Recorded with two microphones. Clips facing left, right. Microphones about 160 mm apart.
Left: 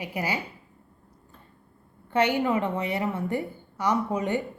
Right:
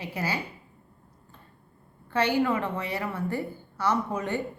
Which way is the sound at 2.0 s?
20° left (ahead or behind).